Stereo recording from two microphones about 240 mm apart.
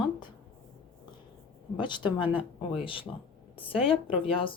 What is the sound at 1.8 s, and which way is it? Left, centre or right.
Speech, centre.